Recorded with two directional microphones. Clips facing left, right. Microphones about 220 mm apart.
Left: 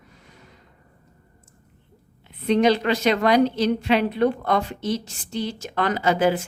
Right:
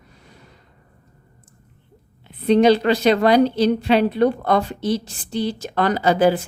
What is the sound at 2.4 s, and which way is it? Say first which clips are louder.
A woman's voice: right 4 dB; 35° right (ahead or behind).